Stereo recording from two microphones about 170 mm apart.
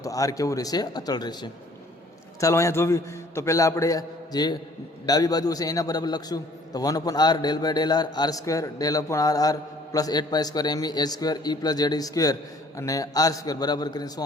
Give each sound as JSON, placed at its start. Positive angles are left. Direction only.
{"t": 0.0, "sound": "a man's voice", "side_deg": 20}